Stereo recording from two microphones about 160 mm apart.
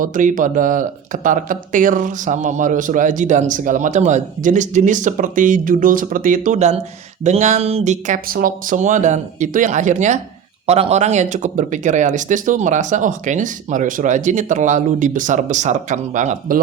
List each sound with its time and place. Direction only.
0.0 s speech: 55° right (ahead or behind)